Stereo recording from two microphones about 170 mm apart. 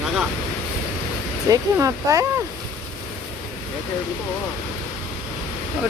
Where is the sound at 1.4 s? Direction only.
20° right (ahead or behind).